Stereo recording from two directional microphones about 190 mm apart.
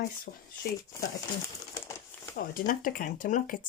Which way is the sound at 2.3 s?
45° left (ahead or behind).